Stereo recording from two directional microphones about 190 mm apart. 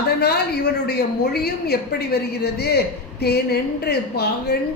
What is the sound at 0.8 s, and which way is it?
A woman's voice, 55° left (ahead or behind).